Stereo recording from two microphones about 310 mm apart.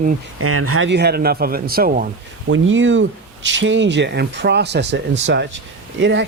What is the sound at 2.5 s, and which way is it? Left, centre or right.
Speech, right.